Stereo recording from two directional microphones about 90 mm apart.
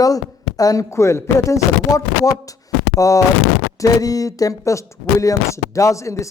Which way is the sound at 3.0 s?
40° left (ahead or behind).